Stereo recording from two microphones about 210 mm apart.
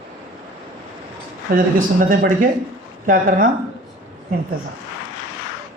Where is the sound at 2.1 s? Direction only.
40° right (ahead or behind).